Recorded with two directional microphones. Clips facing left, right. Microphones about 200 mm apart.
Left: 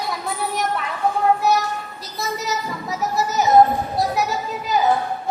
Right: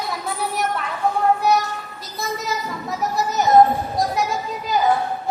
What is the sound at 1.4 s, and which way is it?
Child singing, centre (ahead or behind).